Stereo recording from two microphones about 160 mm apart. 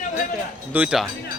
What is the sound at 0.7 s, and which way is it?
Speech, 5° right (ahead or behind).